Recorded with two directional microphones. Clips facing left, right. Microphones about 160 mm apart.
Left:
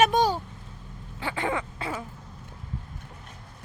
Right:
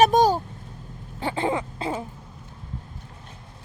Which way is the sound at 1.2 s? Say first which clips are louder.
Right 4 dB; 30° right (ahead or behind).